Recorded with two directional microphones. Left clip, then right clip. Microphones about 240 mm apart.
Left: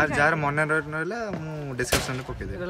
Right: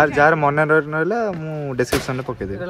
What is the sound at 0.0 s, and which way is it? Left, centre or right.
Speech, centre.